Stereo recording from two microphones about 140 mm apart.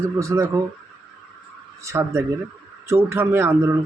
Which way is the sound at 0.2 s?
20° right (ahead or behind).